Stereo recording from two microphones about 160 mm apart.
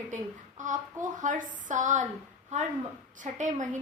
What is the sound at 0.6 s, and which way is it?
A woman's voice, 50° right (ahead or behind).